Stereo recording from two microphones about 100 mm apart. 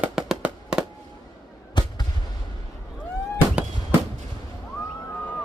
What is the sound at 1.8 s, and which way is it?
Fireworks, 45° left (ahead or behind).